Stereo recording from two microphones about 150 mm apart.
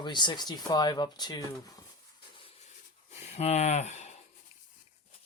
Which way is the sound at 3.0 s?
45° left (ahead or behind).